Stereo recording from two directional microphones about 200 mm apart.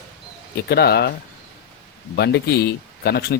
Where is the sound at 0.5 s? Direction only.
55° left (ahead or behind).